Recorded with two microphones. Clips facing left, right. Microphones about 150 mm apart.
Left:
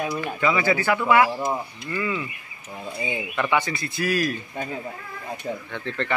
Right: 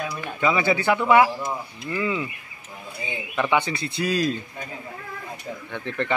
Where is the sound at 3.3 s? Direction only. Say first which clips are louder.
Right 2 dB; 15° right (ahead or behind).